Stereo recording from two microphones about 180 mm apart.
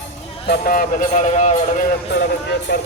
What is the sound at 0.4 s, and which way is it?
A man's voice, 60° left (ahead or behind).